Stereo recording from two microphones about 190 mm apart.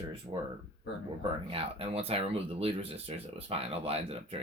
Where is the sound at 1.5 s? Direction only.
30° right (ahead or behind).